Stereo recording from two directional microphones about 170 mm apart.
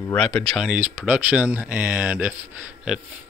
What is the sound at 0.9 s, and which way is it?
Speech, 5° right (ahead or behind).